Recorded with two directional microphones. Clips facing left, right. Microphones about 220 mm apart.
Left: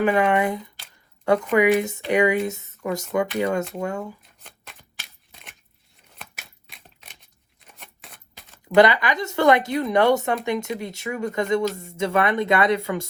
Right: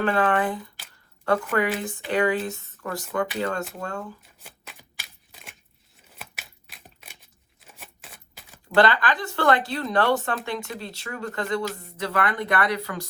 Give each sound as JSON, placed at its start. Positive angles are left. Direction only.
{"t": 0.0, "sound": "speech", "side_deg": 10}
{"t": 4.2, "sound": "a sound", "side_deg": -5}
{"t": 7.6, "sound": "typewriter", "side_deg": -5}
{"t": 8.7, "sound": "speech", "side_deg": 15}